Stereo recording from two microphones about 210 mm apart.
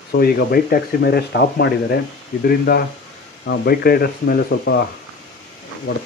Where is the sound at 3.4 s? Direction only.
50° left (ahead or behind).